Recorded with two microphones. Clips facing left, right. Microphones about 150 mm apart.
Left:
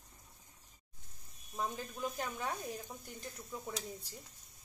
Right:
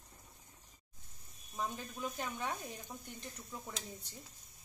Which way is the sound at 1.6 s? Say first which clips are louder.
Left 1 dB; 5° left (ahead or behind).